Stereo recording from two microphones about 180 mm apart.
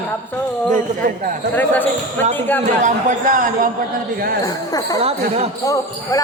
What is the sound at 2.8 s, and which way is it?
Speech, 45° right (ahead or behind).